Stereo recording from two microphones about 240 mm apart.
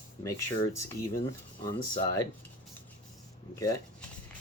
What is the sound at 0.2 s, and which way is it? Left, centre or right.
Speech, centre.